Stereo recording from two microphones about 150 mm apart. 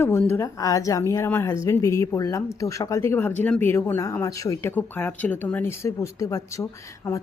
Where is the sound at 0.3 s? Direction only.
20° left (ahead or behind).